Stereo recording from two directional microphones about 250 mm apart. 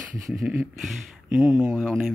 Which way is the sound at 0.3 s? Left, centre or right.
Centre.